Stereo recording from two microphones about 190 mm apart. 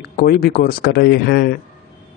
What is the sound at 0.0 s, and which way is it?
Speech, 55° left (ahead or behind).